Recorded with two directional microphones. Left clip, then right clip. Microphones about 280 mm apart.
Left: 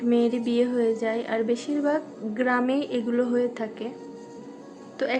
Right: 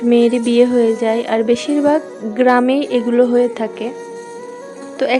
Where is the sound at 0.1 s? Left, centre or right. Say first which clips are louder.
Right 11 dB; right.